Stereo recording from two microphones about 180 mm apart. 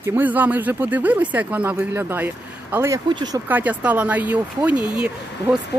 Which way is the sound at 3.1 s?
25° right (ahead or behind).